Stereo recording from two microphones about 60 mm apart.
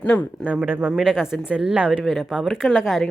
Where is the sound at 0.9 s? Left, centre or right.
Centre.